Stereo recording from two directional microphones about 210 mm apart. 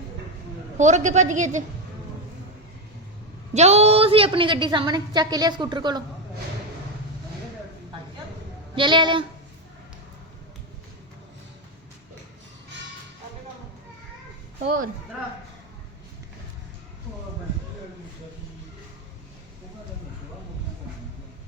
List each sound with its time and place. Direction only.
0.8 s a woman's voice: 35° right (ahead or behind)
3.5 s a woman's voice: 30° right (ahead or behind)
8.7 s a woman's voice: 25° right (ahead or behind)